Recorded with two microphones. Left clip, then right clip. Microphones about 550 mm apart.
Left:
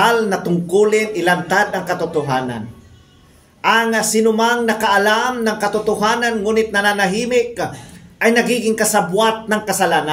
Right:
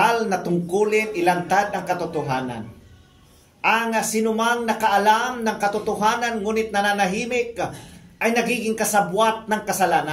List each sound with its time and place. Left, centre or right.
0.0 s speech: right
3.6 s speech: right